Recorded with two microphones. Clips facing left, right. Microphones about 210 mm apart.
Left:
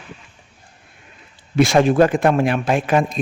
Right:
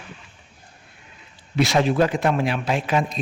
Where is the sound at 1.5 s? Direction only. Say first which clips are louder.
Left 5 dB; 50° left (ahead or behind).